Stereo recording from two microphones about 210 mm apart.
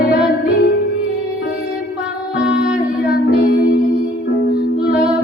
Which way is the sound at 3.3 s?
45° left (ahead or behind).